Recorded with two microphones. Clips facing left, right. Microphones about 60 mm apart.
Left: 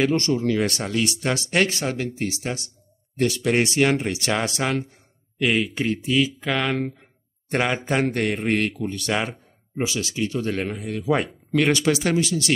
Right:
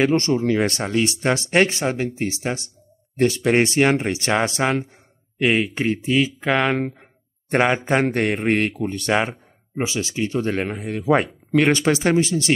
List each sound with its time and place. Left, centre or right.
0.0 s a man's voice: right